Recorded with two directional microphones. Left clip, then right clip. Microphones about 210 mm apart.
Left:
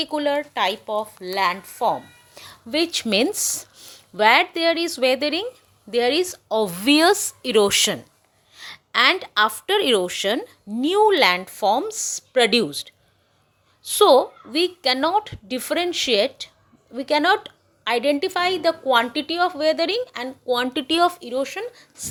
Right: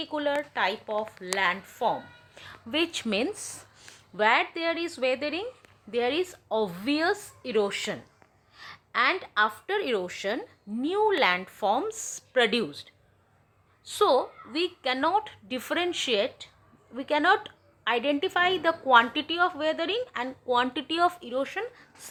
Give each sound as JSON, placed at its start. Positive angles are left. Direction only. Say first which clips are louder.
{"t": 0.0, "sound": "a woman's voice", "louder": "left 6 dB", "side_deg": 30}
{"t": 8.5, "sound": "a woman's voice", "louder": "left 7 dB", "side_deg": 25}
{"t": 14.0, "sound": "a woman's voice", "louder": "left 9 dB", "side_deg": 35}